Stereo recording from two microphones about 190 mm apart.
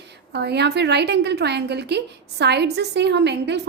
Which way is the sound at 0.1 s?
60° right (ahead or behind).